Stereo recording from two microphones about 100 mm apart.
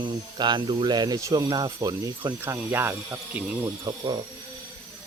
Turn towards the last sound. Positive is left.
turn(degrees=-50)  # may be behind; listen again after turning